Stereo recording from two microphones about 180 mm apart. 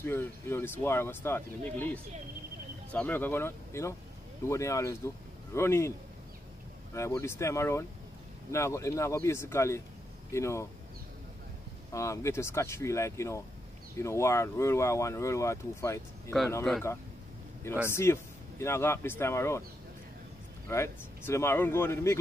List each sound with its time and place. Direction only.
0.0 s speech: 15° left (ahead or behind)
11.9 s speech: 15° left (ahead or behind)
17.8 s speech: 15° left (ahead or behind)
20.6 s speech: 15° left (ahead or behind)